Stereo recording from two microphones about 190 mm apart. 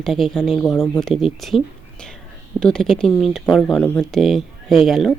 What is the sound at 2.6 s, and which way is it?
Speech, 5° left (ahead or behind).